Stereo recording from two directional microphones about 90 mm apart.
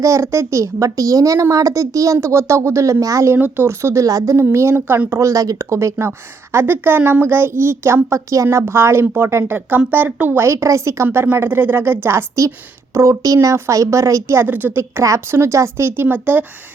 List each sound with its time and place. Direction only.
0.0 s a child's voice: 35° right (ahead or behind)
3.3 s a child's voice: 20° right (ahead or behind)
14.3 s speech: 25° right (ahead or behind)